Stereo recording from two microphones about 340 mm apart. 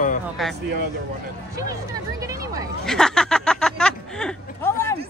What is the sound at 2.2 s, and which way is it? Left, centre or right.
Speech, centre.